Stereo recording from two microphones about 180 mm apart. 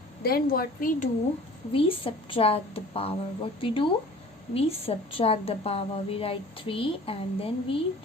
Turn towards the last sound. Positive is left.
turn(degrees=30)  # may be behind; listen again after turning